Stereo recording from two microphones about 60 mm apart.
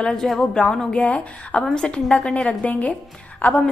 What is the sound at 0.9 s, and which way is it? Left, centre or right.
A woman's voice, left.